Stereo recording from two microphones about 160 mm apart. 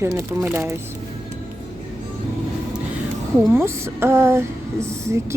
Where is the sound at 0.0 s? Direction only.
15° right (ahead or behind).